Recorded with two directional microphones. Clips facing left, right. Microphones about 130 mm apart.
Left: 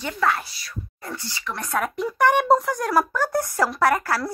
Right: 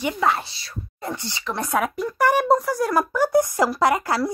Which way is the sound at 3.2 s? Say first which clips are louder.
Right 4 dB; 15° right (ahead or behind).